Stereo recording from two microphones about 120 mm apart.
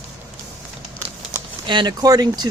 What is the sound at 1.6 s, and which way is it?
Speech, 40° right (ahead or behind).